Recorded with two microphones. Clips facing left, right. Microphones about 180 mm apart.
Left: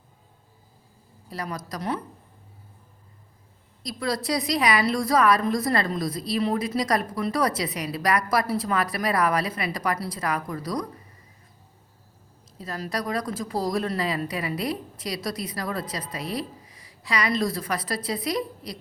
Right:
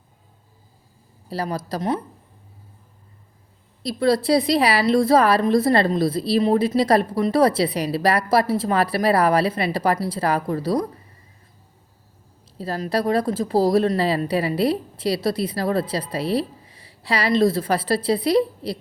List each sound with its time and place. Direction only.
1.3 s a woman's voice: 30° right (ahead or behind)
3.8 s a woman's voice: 30° right (ahead or behind)
12.5 s a woman's voice: 30° right (ahead or behind)